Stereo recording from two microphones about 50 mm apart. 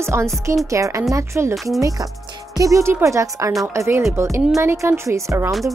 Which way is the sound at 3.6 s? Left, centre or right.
Right.